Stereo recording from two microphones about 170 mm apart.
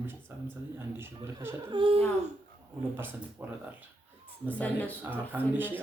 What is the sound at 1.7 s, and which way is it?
Speech, 30° right (ahead or behind).